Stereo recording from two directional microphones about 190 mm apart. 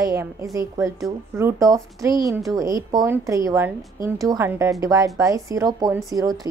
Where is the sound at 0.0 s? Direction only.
15° right (ahead or behind).